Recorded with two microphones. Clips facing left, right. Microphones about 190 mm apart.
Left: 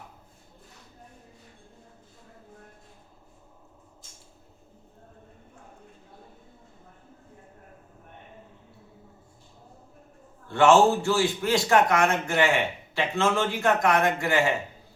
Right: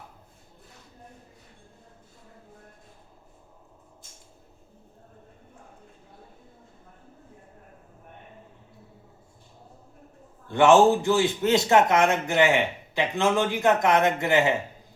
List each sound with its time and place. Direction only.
10.5 s a man's voice: 15° right (ahead or behind)